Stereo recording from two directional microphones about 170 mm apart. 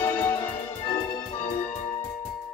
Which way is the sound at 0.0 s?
15° left (ahead or behind).